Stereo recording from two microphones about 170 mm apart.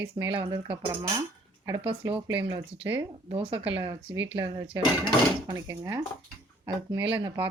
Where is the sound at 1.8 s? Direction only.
30° right (ahead or behind).